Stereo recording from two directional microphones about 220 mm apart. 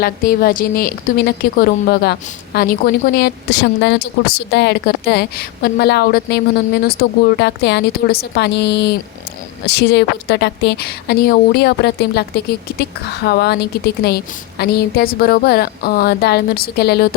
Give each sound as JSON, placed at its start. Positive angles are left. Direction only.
{"t": 0.0, "sound": "a woman's voice", "side_deg": 40}